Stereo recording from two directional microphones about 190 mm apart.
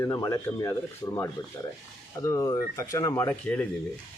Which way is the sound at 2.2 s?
15° left (ahead or behind).